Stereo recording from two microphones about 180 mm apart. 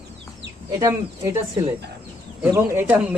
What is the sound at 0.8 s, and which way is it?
Speech, 15° right (ahead or behind).